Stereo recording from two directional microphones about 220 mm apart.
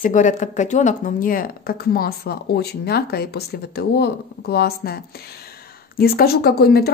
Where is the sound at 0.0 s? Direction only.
35° left (ahead or behind).